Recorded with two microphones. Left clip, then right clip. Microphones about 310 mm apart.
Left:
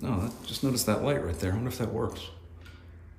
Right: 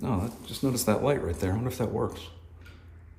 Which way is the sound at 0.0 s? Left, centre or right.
Centre.